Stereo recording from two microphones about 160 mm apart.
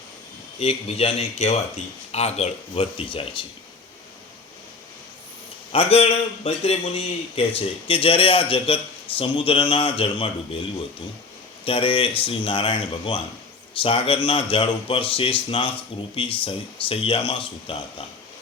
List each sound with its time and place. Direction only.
0.6 s a man's voice: 40° left (ahead or behind)
5.7 s a man's voice: 35° left (ahead or behind)
11.6 s a man's voice: 35° left (ahead or behind)